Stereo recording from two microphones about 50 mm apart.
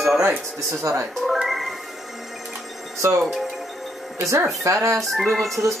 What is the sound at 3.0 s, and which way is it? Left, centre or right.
Speech, right.